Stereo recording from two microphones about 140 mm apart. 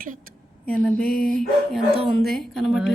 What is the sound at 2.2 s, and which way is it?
Speech, centre (ahead or behind).